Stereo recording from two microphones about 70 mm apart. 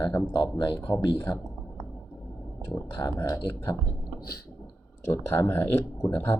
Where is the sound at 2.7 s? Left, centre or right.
Left.